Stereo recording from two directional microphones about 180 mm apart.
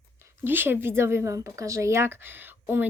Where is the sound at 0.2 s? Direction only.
10° right (ahead or behind).